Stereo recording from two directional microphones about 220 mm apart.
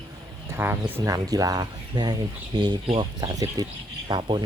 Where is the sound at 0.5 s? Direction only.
10° right (ahead or behind).